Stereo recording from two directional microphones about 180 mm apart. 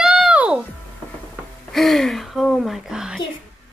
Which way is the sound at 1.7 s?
Centre (ahead or behind).